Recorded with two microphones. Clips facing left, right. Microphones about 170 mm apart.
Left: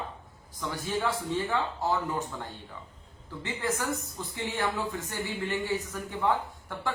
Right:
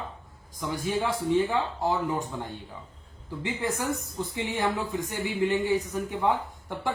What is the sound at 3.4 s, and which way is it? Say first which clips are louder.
Speech: right 2 dB; 15° right (ahead or behind).